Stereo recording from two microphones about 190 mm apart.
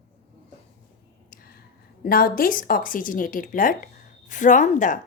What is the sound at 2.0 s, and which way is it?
A woman's voice, 50° left (ahead or behind).